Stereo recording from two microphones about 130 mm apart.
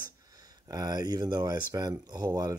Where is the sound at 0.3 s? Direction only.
30° right (ahead or behind).